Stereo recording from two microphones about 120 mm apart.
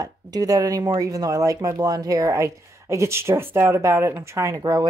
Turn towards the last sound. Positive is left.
turn(degrees=-30)  # may be behind; listen again after turning